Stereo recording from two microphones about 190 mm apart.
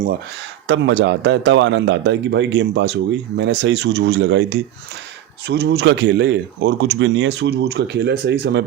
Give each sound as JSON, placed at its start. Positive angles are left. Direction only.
{"t": 0.7, "sound": "a man's voice", "side_deg": -65}